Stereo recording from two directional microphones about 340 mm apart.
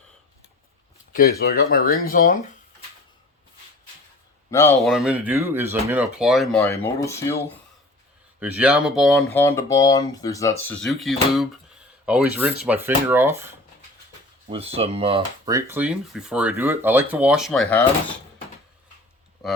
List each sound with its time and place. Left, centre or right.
1.1 s speech: left
4.5 s speech: centre
8.4 s speech: centre
14.5 s speech: centre